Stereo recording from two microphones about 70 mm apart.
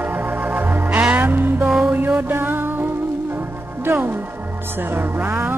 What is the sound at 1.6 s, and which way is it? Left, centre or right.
Music, centre.